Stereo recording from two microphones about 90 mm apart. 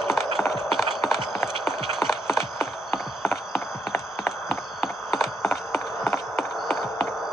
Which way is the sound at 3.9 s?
25° left (ahead or behind).